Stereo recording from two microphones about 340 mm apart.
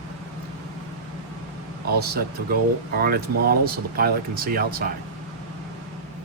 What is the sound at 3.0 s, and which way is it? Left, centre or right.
Speech, right.